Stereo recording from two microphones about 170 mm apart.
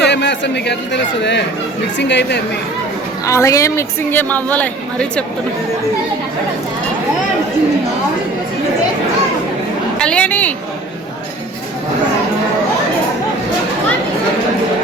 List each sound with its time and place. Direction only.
0.0 s a man's voice: 90° left
3.2 s a woman's voice: 20° left (ahead or behind)
10.0 s a woman's voice: 5° left (ahead or behind)